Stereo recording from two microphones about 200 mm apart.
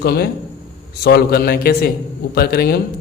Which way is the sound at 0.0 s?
50° left (ahead or behind).